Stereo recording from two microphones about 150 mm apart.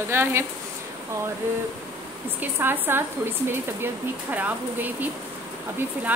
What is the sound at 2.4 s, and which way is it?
A woman's voice, 15° right (ahead or behind).